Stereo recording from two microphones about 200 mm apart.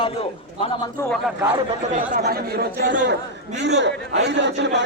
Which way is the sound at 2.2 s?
50° right (ahead or behind).